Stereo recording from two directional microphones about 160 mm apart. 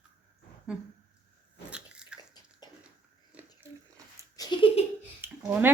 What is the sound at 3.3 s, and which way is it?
Biting, 15° right (ahead or behind).